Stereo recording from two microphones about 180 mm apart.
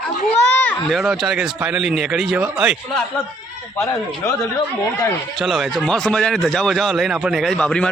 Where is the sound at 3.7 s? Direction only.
15° left (ahead or behind).